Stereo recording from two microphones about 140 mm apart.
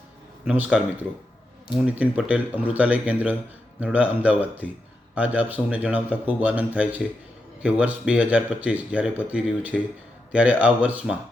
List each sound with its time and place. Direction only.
0.4 s speech: 10° right (ahead or behind)
1.8 s speech: 10° right (ahead or behind)